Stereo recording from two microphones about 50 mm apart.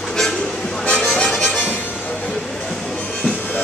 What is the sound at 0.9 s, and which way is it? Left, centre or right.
Music, left.